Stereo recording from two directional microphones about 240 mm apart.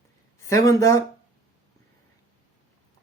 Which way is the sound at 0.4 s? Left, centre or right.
Centre.